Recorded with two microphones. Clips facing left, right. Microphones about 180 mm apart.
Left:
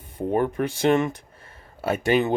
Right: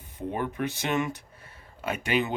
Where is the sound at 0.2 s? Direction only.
45° left (ahead or behind).